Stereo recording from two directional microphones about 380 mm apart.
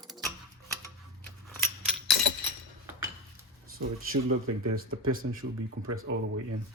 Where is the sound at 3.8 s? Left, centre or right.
Right.